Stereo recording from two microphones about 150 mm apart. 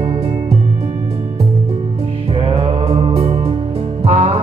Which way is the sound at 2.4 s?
35° right (ahead or behind).